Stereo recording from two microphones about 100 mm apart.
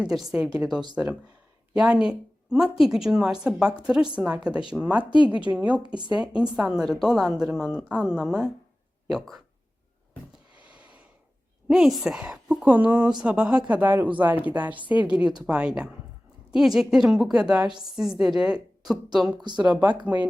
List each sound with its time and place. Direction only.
0.0 s a woman's voice: 5° right (ahead or behind)
5.1 s a woman's voice: 55° left (ahead or behind)
5.5 s a woman's voice: 10° right (ahead or behind)
10.8 s a sound: 15° right (ahead or behind)
11.7 s a woman's voice: centre (ahead or behind)
17.6 s a woman's voice: 50° right (ahead or behind)
17.9 s a woman's voice: 5° right (ahead or behind)